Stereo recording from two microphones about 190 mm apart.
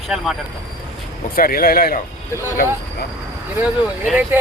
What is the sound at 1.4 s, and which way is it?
Speech, 50° left (ahead or behind).